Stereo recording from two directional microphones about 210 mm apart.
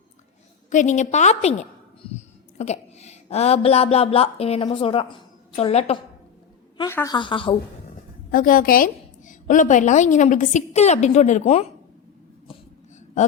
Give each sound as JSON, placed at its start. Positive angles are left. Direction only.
{"t": 0.7, "sound": "a woman's voice", "side_deg": 35}
{"t": 6.7, "sound": "speech", "side_deg": 15}
{"t": 8.3, "sound": "a woman's voice", "side_deg": 40}